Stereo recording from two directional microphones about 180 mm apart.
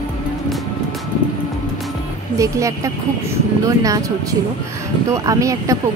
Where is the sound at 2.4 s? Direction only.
15° right (ahead or behind).